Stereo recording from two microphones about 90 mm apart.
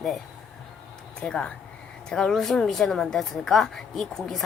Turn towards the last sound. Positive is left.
turn(degrees=5)  # may be behind; listen again after turning